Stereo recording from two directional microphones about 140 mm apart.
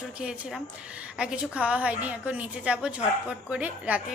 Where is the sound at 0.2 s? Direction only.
5° right (ahead or behind).